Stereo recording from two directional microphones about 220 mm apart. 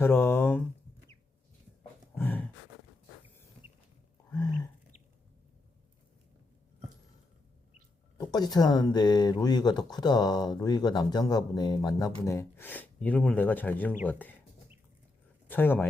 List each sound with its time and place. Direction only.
0.0 s speech: 10° left (ahead or behind)
2.1 s a sound: 10° left (ahead or behind)
4.3 s chewing: 15° left (ahead or behind)
8.2 s speech: 20° left (ahead or behind)
15.4 s speech: 10° left (ahead or behind)